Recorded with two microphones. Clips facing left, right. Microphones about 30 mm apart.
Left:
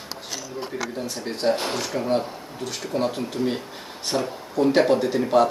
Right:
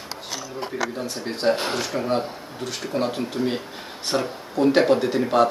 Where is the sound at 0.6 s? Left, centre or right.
Centre.